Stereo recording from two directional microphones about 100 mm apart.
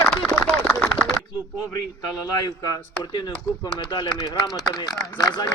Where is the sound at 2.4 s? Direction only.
40° left (ahead or behind).